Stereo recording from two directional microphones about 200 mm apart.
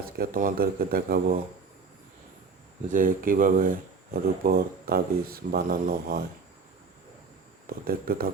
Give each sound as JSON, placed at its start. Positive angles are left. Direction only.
{"t": 0.0, "sound": "speech", "side_deg": -45}
{"t": 2.9, "sound": "speech", "side_deg": -45}
{"t": 7.9, "sound": "speech", "side_deg": -50}